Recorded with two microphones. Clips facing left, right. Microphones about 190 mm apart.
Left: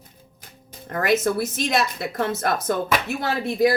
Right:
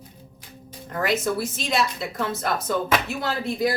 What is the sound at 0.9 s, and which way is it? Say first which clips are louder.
A woman's voice: left 3 dB; 55° left (ahead or behind).